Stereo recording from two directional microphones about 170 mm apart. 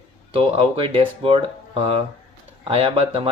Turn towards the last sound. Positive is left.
turn(degrees=-35)  # may be behind; listen again after turning